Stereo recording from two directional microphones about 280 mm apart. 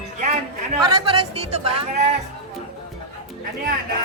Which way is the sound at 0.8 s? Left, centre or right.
Centre.